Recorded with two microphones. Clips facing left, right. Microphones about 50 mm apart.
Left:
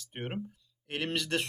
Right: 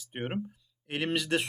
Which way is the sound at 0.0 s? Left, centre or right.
Centre.